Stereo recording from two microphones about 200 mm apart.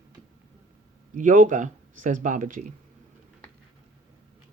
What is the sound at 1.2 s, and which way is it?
Speech, 40° right (ahead or behind).